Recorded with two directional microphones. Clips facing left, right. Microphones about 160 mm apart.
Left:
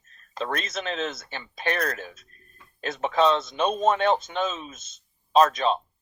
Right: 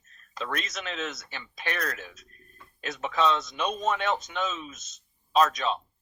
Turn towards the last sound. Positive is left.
turn(degrees=30)  # may be behind; listen again after turning